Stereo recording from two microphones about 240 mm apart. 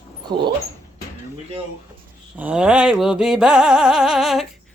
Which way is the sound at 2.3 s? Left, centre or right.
Centre.